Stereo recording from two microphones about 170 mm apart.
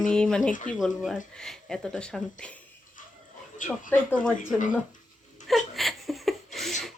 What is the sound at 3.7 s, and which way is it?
Speech, 5° left (ahead or behind).